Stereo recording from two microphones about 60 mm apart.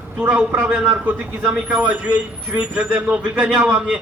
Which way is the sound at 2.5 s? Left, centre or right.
Centre.